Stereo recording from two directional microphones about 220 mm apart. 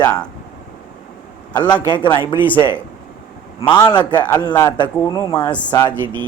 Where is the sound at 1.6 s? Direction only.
20° left (ahead or behind).